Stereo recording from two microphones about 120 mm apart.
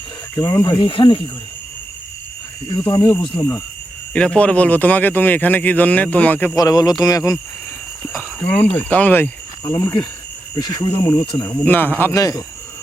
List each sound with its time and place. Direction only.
0.3 s speech: 30° left (ahead or behind)
0.8 s speech: 40° left (ahead or behind)
2.8 s speech: 25° left (ahead or behind)
4.1 s a man's voice: 10° left (ahead or behind)
6.6 s speech: 35° left (ahead or behind)
8.4 s a man's voice: 15° left (ahead or behind)
9.6 s speech: 30° left (ahead or behind)
11.6 s a man's voice: 15° left (ahead or behind)